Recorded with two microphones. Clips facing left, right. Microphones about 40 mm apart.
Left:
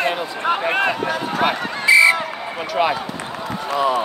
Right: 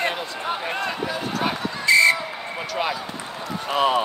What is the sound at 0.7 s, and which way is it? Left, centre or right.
Speech, left.